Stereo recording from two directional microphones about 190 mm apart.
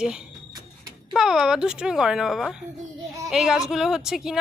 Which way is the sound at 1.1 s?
5° right (ahead or behind).